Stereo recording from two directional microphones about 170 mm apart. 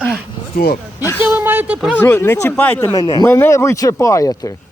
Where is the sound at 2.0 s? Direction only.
10° left (ahead or behind).